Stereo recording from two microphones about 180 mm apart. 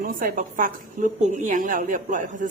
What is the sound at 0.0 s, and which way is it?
A woman's voice, 55° right (ahead or behind).